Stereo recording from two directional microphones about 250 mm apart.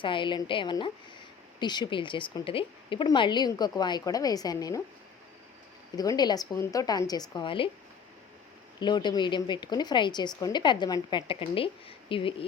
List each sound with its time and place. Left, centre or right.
0.0 s a woman's voice: centre
6.0 s speech: centre
8.8 s speech: centre